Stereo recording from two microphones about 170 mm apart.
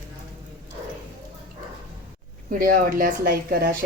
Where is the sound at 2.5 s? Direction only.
50° right (ahead or behind).